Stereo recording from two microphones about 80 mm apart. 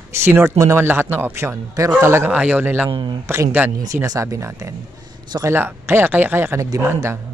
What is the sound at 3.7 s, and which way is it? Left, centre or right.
Speech, right.